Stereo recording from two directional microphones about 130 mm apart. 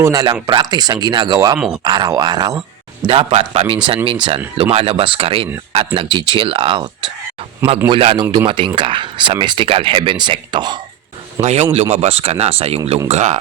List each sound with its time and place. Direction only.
0.0 s speech: 25° right (ahead or behind)
1.5 s speech: 5° right (ahead or behind)
1.8 s speech: 35° right (ahead or behind)
7.9 s speech: 40° right (ahead or behind)
11.3 s speech: 60° right (ahead or behind)
13.1 s speech: 60° right (ahead or behind)